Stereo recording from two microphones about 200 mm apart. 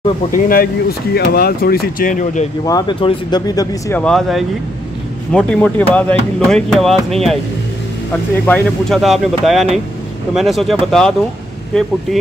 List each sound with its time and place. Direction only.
0.3 s speech: 45° left (ahead or behind)
2.6 s speech: 20° left (ahead or behind)
4.0 s speech: centre (ahead or behind)